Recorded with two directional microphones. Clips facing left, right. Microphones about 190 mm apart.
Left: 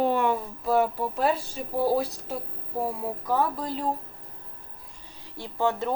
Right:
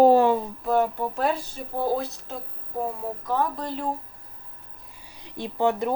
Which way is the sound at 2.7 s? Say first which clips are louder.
Even; 10° left (ahead or behind).